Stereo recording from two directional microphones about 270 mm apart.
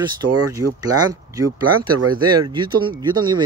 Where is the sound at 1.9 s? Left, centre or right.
Right.